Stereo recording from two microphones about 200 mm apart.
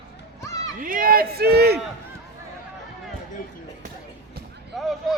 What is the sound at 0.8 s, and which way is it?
Speech, 45° right (ahead or behind).